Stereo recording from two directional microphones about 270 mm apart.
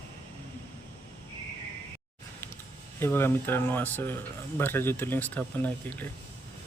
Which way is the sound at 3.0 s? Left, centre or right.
Centre.